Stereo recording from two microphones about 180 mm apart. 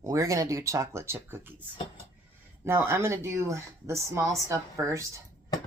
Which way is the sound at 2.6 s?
15° right (ahead or behind).